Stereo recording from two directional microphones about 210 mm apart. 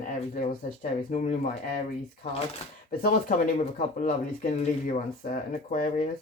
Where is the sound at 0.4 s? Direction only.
35° left (ahead or behind).